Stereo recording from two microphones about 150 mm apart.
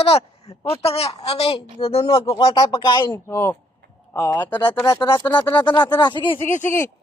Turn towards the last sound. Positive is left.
turn(degrees=15)  # may be behind; listen again after turning